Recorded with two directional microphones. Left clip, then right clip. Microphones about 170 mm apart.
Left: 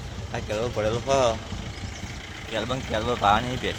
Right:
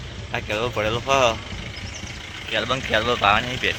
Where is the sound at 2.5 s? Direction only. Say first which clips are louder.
Right 6 dB; 10° left (ahead or behind).